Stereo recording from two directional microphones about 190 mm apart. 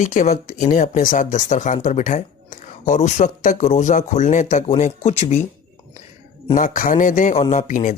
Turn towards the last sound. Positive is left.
turn(degrees=40)  # may be behind; listen again after turning